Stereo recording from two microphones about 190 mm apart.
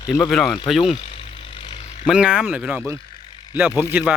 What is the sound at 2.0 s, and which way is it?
Speech, 5° right (ahead or behind).